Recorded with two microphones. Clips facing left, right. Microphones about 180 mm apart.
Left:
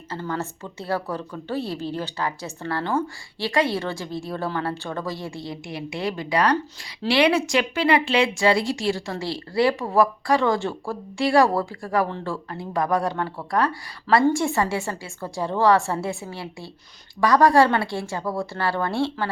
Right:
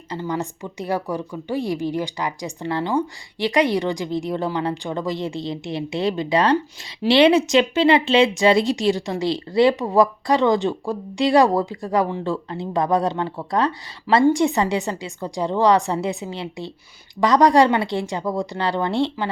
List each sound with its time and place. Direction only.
0.1 s speech: 15° right (ahead or behind)